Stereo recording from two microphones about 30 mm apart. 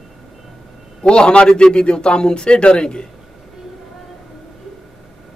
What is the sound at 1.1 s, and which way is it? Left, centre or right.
A man's voice, left.